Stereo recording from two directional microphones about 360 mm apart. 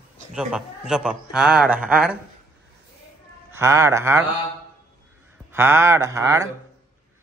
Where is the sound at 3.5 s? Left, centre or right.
Centre.